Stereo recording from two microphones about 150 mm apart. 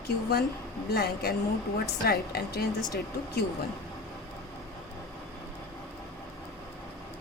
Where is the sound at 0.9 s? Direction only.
90° left.